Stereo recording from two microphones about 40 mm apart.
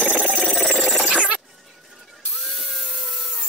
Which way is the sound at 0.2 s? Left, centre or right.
Centre.